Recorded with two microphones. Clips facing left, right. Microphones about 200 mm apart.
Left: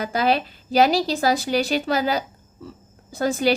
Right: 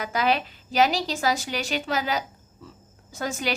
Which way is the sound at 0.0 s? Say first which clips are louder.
Left 3 dB; 35° left (ahead or behind).